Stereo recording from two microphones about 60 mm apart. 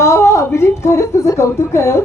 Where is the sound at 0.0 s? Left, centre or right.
Left.